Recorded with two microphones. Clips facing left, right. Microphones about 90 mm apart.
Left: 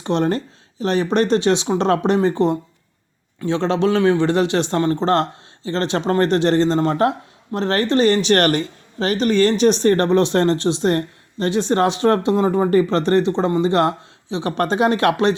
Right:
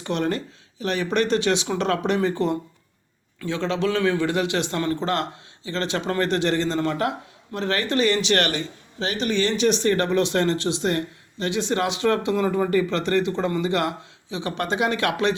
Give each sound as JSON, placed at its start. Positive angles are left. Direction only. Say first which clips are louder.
{"t": 0.0, "sound": "speech", "louder": "left 5 dB", "side_deg": 35}